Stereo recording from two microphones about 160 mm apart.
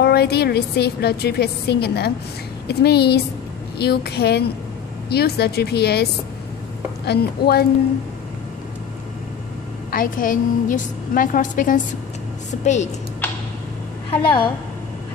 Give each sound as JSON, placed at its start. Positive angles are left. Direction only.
{"t": 0.0, "sound": "a woman's voice", "side_deg": 85}
{"t": 7.1, "sound": "speech", "side_deg": 80}
{"t": 9.8, "sound": "a woman's voice", "side_deg": 60}
{"t": 14.2, "sound": "a woman's voice", "side_deg": 30}